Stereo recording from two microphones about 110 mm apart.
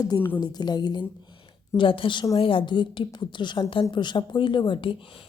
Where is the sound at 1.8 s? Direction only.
50° left (ahead or behind).